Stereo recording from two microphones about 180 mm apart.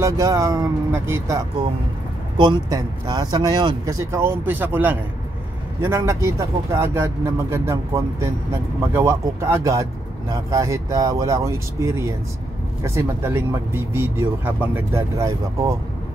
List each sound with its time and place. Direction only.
0.0 s speech: 15° right (ahead or behind)